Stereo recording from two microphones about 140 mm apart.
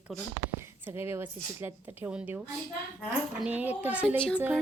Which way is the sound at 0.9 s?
15° right (ahead or behind).